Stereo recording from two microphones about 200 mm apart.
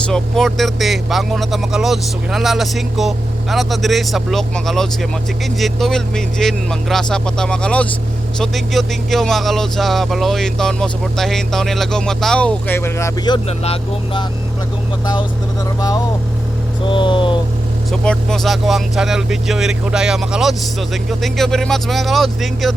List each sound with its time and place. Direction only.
0.1 s speech: centre (ahead or behind); by 14.3 s 25° left (ahead or behind)
16.9 s speech: 25° left (ahead or behind)
18.0 s speech: 5° left (ahead or behind)